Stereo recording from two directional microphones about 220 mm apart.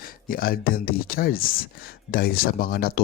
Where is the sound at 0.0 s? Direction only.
40° left (ahead or behind).